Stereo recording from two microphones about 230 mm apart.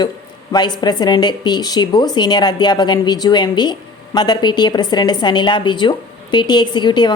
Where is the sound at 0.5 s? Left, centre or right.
Centre.